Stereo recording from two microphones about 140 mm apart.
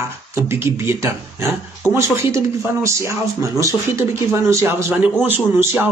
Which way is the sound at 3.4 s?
25° right (ahead or behind).